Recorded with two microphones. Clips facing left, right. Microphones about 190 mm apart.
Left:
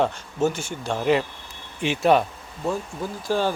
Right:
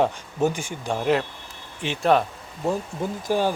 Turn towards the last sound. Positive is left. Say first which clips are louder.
# right 1 dB
turn(degrees=-15)  # may be behind; listen again after turning